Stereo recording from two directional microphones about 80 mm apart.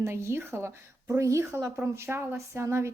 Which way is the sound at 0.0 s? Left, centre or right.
Right.